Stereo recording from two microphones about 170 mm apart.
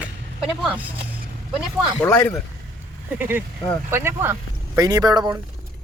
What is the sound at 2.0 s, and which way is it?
Speech, 15° left (ahead or behind).